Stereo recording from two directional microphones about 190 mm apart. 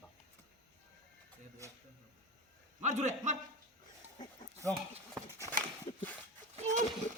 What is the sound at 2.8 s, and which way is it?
Speech, 40° right (ahead or behind).